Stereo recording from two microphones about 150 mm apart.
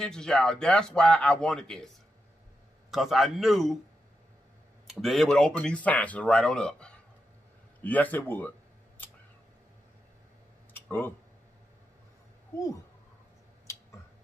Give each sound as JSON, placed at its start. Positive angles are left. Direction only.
{"t": 0.0, "sound": "a man's voice", "side_deg": 5}
{"t": 2.9, "sound": "a man's voice", "side_deg": 0}
{"t": 5.0, "sound": "speech", "side_deg": 0}
{"t": 10.7, "sound": "a sound", "side_deg": 15}
{"t": 12.5, "sound": "speech", "side_deg": 20}